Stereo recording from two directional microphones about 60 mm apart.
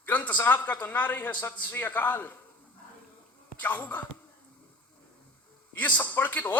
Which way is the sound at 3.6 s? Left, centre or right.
Left.